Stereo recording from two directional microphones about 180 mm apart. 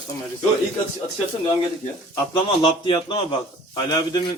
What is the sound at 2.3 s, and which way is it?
A man's voice, 25° left (ahead or behind).